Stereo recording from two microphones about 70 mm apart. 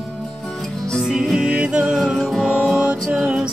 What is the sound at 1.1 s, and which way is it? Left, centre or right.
Music, centre.